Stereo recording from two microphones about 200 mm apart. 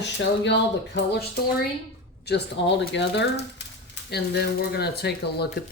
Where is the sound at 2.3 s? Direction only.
55° left (ahead or behind).